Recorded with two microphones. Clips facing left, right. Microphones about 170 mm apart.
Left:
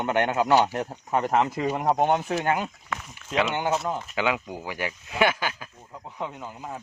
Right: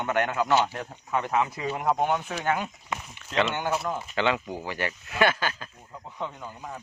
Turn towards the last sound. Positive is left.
turn(degrees=10)  # may be behind; listen again after turning